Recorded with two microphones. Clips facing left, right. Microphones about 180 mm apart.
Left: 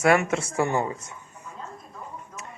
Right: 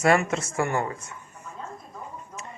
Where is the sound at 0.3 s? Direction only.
15° left (ahead or behind).